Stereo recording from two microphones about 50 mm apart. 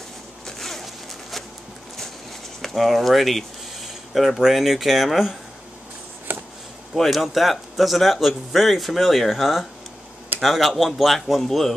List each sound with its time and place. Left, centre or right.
0.5 s zipper: centre
2.6 s speech: centre
6.3 s a sound: right
7.0 s a man's voice: centre